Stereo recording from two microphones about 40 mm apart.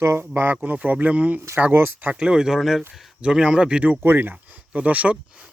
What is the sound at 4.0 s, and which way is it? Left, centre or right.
Speech, right.